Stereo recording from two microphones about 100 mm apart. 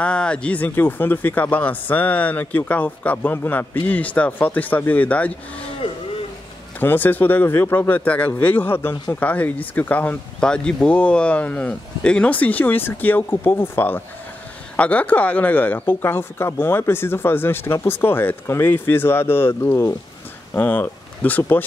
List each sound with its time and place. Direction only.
0.0 s speech: 10° left (ahead or behind)
6.8 s speech: 20° left (ahead or behind)